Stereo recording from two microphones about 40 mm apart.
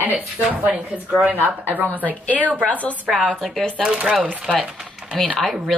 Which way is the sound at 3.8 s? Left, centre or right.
Centre.